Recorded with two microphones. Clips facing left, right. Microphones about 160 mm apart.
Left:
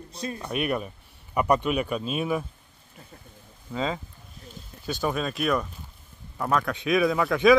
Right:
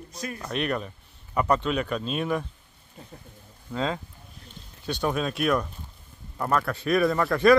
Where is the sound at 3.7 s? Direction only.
Centre (ahead or behind).